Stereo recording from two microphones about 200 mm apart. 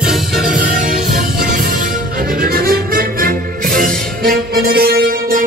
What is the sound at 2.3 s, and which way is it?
Music, 45° right (ahead or behind).